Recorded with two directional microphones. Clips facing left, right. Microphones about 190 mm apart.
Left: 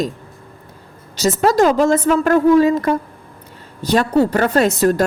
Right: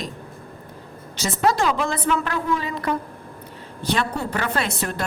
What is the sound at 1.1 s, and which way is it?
A woman's voice, 40° left (ahead or behind).